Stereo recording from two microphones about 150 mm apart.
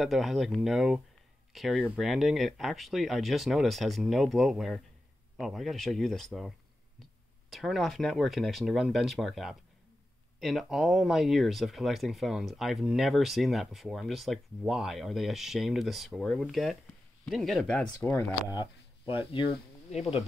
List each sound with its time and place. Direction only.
0.0 s speech: centre (ahead or behind)
19.2 s speech: 40° left (ahead or behind)